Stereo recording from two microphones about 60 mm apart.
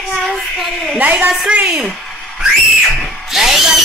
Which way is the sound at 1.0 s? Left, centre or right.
Right.